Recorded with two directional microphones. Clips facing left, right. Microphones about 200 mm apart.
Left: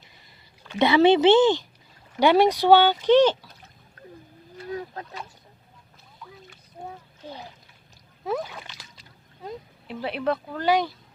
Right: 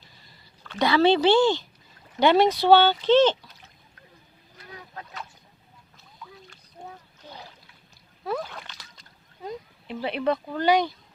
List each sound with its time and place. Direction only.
0.6 s speech: 20° left (ahead or behind)
8.2 s speech: 15° left (ahead or behind); by 10.9 s centre (ahead or behind)